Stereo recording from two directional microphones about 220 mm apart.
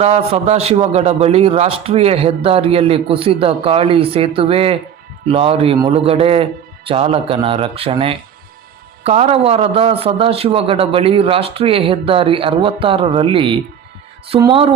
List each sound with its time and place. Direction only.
0.0 s a man's voice: 30° right (ahead or behind)